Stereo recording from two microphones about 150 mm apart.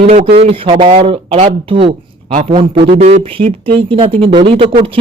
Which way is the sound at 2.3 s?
50° right (ahead or behind).